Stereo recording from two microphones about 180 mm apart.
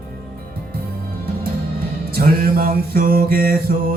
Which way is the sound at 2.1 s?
55° right (ahead or behind).